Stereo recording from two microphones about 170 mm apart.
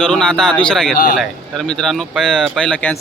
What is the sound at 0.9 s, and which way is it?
Speech, 55° left (ahead or behind).